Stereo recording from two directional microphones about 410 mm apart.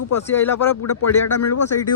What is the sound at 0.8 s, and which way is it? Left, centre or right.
Speech, left.